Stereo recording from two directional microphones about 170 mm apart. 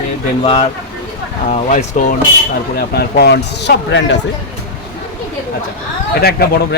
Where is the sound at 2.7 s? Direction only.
70° left (ahead or behind); by 4.2 s 90° left.